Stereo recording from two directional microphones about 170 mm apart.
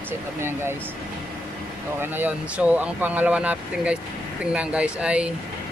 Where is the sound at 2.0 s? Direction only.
10° right (ahead or behind).